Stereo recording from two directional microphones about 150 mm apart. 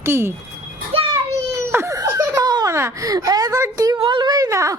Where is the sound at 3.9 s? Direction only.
35° right (ahead or behind).